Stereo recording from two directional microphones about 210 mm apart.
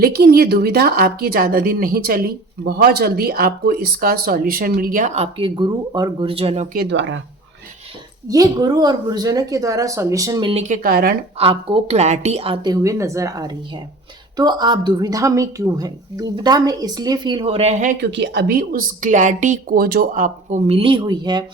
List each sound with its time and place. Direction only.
0.0 s speech: 50° right (ahead or behind); by 6.7 s 30° right (ahead or behind)
6.7 s speech: 55° right (ahead or behind)
8.3 s speech: 20° right (ahead or behind)
10.5 s a woman's voice: 35° right (ahead or behind)
10.8 s speech: 45° right (ahead or behind)
11.3 s a woman's voice: 25° right (ahead or behind)
18.0 s a woman's voice: 55° right (ahead or behind); by 21.4 s 20° right (ahead or behind)